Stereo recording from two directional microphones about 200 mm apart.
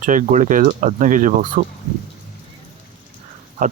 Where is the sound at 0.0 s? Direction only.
40° right (ahead or behind).